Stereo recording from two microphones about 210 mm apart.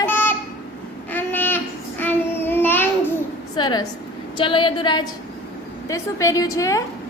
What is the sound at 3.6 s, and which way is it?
A woman's voice, 20° left (ahead or behind).